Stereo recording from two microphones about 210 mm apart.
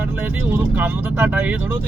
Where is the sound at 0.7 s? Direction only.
10° right (ahead or behind).